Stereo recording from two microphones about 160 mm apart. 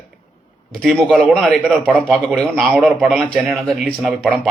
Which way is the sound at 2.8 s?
10° right (ahead or behind).